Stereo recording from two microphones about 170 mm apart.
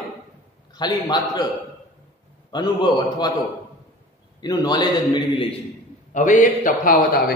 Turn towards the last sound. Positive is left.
turn(degrees=55)  # may be behind; listen again after turning